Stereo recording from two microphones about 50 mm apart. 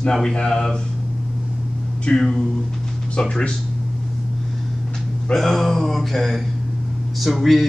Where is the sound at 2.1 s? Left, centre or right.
Centre.